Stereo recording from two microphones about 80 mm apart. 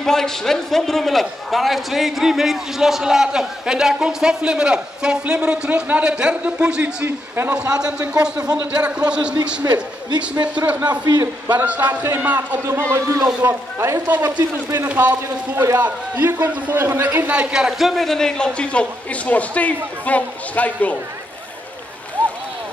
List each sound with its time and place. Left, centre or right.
0.0 s a man's voice: centre
7.1 s a man's voice: right
7.5 s a man's voice: centre
10.9 s a man's voice: right
11.4 s a man's voice: right
12.9 s speech: right
14.9 s a man's voice: right
15.2 s a man's voice: right; by 21.0 s centre